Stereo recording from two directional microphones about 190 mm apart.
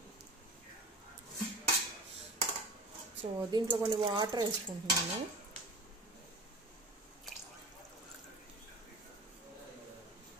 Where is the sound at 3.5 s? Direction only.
25° right (ahead or behind).